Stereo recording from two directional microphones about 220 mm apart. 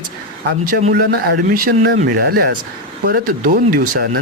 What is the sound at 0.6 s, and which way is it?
Speech, 40° right (ahead or behind).